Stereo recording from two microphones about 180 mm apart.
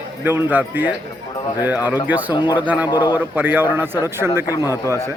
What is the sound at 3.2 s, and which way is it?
Speech, 10° right (ahead or behind).